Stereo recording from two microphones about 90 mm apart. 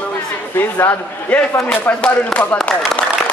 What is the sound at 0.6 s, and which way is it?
Speech, 20° left (ahead or behind).